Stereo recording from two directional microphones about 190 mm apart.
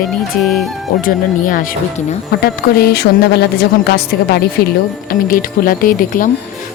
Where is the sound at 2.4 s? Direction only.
55° left (ahead or behind).